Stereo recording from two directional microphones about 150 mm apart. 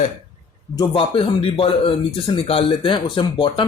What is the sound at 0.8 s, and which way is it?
Speech, 35° left (ahead or behind).